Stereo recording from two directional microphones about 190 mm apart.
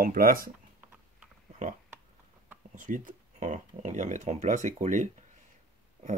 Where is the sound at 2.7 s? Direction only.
45° right (ahead or behind).